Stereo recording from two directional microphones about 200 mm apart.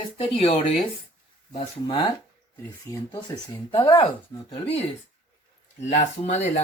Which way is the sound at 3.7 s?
20° left (ahead or behind).